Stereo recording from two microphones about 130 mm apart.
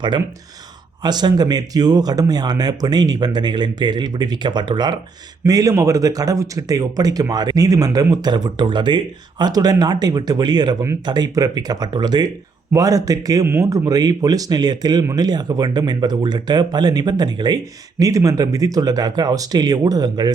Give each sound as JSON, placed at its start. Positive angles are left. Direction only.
{"t": 1.0, "sound": "a man's voice", "side_deg": -35}